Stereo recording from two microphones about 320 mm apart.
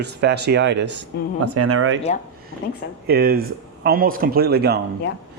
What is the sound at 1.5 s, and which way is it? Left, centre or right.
Speech, right.